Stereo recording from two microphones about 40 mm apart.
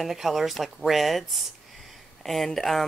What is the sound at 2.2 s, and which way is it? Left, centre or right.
Speech, centre.